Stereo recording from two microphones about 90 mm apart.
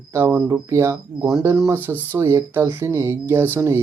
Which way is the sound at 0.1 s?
25° right (ahead or behind).